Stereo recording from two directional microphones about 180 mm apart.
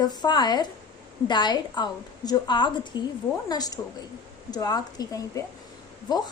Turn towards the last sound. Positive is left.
turn(degrees=20)  # may be behind; listen again after turning